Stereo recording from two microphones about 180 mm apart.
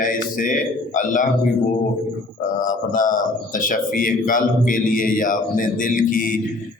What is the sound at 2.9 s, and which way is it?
A man's voice, 50° left (ahead or behind).